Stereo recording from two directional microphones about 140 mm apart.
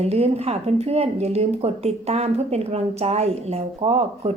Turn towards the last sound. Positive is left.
turn(degrees=-45)  # may be behind; listen again after turning